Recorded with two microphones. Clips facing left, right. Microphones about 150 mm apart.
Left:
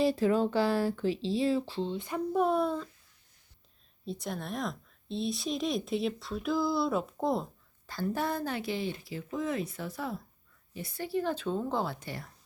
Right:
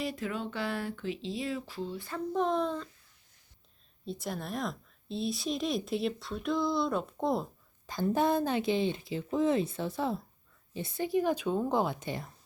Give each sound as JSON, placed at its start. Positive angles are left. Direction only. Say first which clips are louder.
{"t": 0.0, "sound": "speech", "louder": "left 9 dB", "side_deg": 30}
{"t": 4.0, "sound": "a woman's voice", "louder": "even", "side_deg": 0}
{"t": 7.9, "sound": "a woman's voice", "louder": "right 4 dB", "side_deg": -20}